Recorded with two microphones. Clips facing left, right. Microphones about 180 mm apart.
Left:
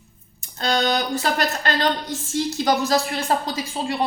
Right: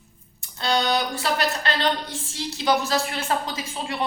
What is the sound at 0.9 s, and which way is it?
A woman's voice, 45° left (ahead or behind).